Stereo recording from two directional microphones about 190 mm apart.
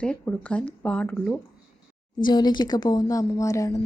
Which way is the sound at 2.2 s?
20° left (ahead or behind).